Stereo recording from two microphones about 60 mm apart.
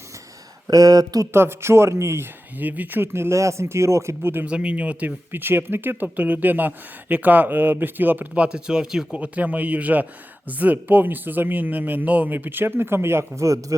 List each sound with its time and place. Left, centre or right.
0.7 s speech: right
1.3 s speech: right
2.6 s speech: right
4.2 s speech: right
4.4 s speech: centre
5.3 s speech: right
8.4 s speech: centre
9.1 s speech: right